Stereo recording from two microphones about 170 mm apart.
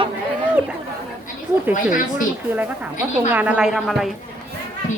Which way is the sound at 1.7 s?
50° left (ahead or behind).